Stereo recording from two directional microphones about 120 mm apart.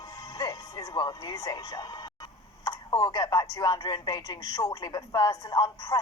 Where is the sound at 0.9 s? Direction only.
35° left (ahead or behind).